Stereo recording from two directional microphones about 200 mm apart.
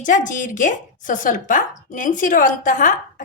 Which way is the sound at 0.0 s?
40° left (ahead or behind).